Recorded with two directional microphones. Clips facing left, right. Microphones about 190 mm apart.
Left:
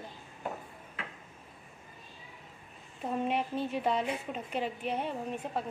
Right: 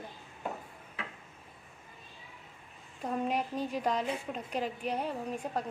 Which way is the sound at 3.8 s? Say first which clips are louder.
Left 1 dB; 5° left (ahead or behind).